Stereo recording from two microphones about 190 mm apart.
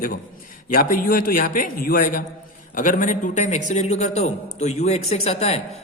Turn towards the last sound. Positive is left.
turn(degrees=35)  # may be behind; listen again after turning